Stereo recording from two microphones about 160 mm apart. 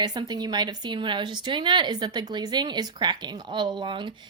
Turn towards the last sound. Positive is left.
turn(degrees=-30)  # may be behind; listen again after turning